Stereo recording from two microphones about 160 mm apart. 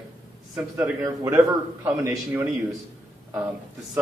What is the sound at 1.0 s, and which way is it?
Speech, 20° right (ahead or behind).